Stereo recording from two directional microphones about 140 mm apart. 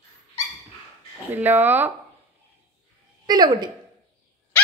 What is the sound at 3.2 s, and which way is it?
Speech, 30° right (ahead or behind).